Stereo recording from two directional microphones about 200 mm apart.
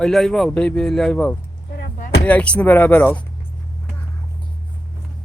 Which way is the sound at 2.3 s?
5° left (ahead or behind).